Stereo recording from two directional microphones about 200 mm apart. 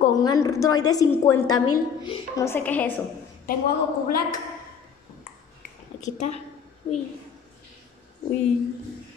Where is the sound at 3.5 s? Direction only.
45° left (ahead or behind).